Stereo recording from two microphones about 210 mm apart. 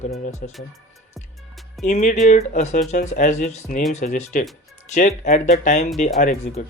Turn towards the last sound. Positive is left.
turn(degrees=30)  # may be behind; listen again after turning